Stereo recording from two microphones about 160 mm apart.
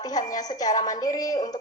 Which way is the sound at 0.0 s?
25° left (ahead or behind).